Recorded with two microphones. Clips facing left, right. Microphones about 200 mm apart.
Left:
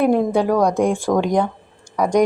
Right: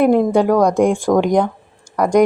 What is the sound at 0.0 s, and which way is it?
A woman's voice, 10° right (ahead or behind).